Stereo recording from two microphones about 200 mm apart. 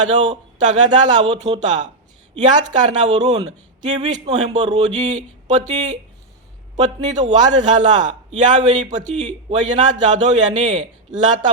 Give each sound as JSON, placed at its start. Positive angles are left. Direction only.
{"t": 0.0, "sound": "a man's voice", "side_deg": -35}